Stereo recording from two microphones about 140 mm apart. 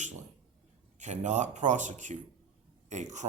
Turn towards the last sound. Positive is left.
turn(degrees=-60)  # may be behind; listen again after turning